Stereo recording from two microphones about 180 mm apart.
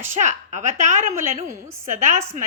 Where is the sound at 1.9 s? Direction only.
45° right (ahead or behind).